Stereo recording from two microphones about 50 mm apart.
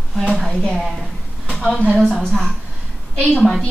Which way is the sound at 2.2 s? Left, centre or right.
Centre.